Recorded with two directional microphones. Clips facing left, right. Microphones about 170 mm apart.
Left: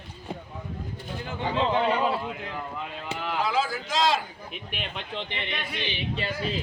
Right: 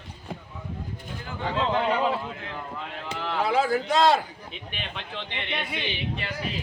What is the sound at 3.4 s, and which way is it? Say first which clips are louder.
Speech: right 6 dB; 60° right (ahead or behind).